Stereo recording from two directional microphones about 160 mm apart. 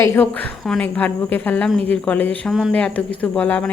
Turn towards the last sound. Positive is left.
turn(degrees=10)  # may be behind; listen again after turning